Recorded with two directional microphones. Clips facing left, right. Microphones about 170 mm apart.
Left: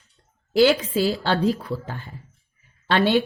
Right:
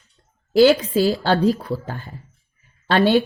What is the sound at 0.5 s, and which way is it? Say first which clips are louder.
A woman's voice: right 4 dB; 40° right (ahead or behind).